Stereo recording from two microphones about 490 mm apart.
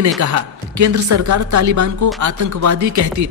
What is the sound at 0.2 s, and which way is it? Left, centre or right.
Speech, right.